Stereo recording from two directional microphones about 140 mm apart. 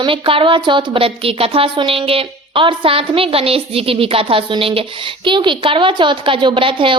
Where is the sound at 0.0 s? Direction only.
40° right (ahead or behind).